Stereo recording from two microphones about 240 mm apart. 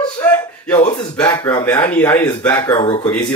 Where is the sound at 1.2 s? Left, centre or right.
Centre.